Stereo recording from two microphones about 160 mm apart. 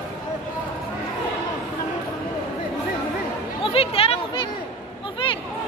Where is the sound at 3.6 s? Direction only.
35° left (ahead or behind).